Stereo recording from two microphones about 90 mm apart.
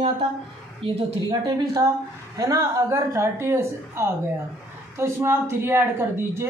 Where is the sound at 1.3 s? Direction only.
45° right (ahead or behind).